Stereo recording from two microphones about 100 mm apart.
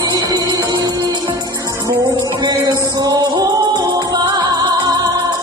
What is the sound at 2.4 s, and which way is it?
Music, 40° right (ahead or behind).